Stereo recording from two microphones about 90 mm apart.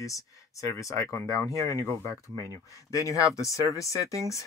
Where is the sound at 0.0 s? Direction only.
35° left (ahead or behind).